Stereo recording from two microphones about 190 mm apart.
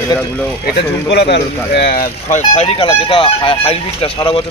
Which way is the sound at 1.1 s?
60° left (ahead or behind).